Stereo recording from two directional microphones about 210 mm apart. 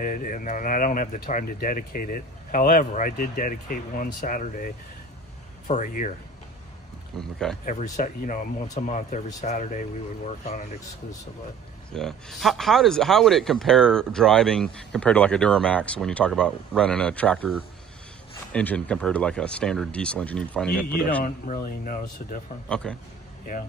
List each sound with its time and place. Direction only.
0.0 s speech: 40° left (ahead or behind)
7.2 s speech: 5° left (ahead or behind)
7.6 s speech: 35° left (ahead or behind)
11.9 s speech: centre (ahead or behind)
21.2 s speech: 40° left (ahead or behind)
22.9 s speech: 5° left (ahead or behind)